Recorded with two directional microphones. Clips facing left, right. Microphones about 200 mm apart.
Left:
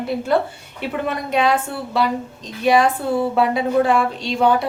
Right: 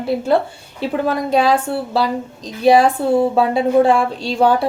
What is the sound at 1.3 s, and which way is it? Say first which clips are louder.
A woman's voice: right 2 dB; 30° right (ahead or behind).